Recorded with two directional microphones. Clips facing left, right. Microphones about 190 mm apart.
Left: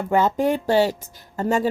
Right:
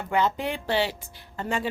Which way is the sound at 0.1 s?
45° left (ahead or behind).